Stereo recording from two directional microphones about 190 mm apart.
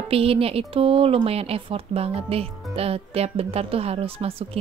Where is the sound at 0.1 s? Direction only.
30° right (ahead or behind).